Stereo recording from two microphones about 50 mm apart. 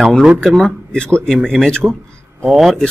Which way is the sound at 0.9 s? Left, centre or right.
Centre.